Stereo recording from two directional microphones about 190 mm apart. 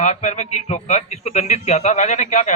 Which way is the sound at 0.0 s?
35° left (ahead or behind).